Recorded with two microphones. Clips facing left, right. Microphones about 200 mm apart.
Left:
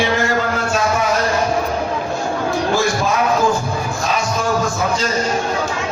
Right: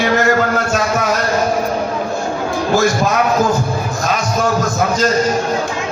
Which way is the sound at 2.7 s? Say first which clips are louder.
Right 6 dB; 40° right (ahead or behind).